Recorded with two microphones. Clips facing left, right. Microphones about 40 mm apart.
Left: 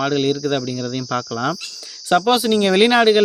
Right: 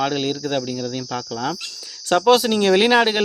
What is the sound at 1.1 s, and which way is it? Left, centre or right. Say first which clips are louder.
Cricket: left 5 dB; left.